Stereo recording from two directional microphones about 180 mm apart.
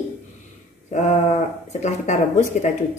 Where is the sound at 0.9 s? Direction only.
40° left (ahead or behind).